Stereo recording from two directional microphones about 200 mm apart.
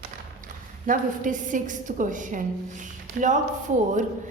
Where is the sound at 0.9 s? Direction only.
40° right (ahead or behind).